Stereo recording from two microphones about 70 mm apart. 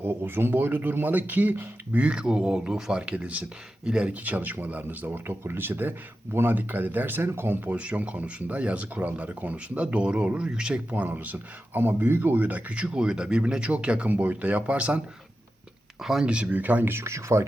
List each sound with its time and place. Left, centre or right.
0.0 s speech: right; by 10.8 s centre
10.9 s speech: right
16.0 s speech: centre
16.2 s speech: centre; by 17.4 s right